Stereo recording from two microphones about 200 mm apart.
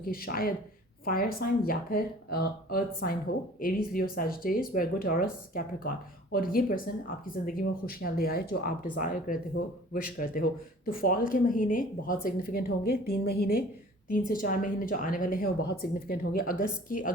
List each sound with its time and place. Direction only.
0.0 s speech: 45° left (ahead or behind)